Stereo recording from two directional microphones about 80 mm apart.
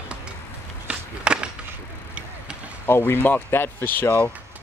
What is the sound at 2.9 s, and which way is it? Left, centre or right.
Speech, left.